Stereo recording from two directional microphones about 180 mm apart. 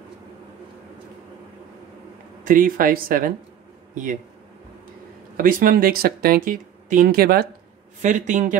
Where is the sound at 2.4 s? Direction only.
50° right (ahead or behind).